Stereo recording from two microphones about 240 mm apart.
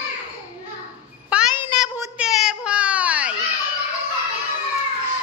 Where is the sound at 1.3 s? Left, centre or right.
Centre.